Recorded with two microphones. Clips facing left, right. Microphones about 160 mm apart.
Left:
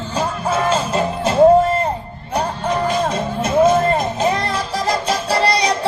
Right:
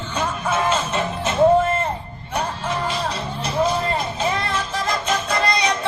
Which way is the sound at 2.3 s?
40° left (ahead or behind).